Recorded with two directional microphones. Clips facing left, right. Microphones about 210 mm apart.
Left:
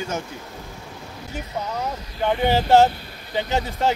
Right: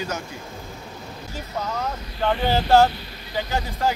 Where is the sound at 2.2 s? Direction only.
15° left (ahead or behind).